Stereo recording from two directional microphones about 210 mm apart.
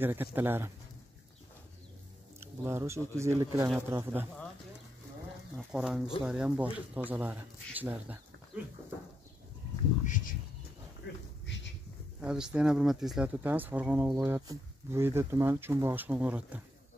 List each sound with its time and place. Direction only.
0.0 s speech: 10° right (ahead or behind)
2.4 s speech: 15° right (ahead or behind)
5.6 s speech: 5° right (ahead or behind)
10.0 s speech: 40° left (ahead or behind)
11.0 s dog: 55° left (ahead or behind)
12.2 s speech: 5° right (ahead or behind)